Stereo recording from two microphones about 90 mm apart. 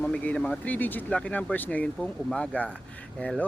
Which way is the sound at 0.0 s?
15° left (ahead or behind).